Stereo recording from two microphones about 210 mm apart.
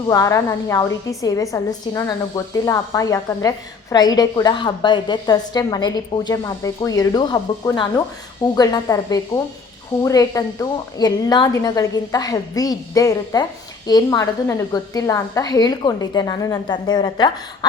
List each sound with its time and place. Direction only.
0.1 s a woman's voice: 15° left (ahead or behind)